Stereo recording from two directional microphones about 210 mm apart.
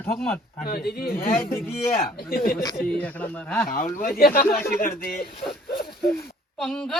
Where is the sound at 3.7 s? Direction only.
40° left (ahead or behind).